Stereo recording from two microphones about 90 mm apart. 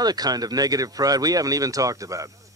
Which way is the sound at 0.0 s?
45° right (ahead or behind).